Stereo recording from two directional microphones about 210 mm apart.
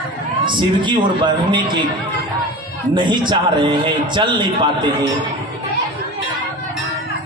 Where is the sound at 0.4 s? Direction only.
20° right (ahead or behind).